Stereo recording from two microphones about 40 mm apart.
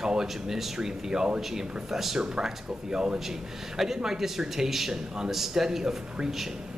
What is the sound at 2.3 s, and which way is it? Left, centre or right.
Speech, centre.